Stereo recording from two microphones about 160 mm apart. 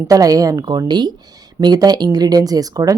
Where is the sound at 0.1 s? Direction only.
20° right (ahead or behind).